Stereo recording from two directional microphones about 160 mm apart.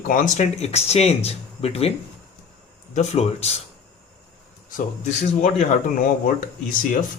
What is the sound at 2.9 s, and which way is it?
Speech, 45° left (ahead or behind).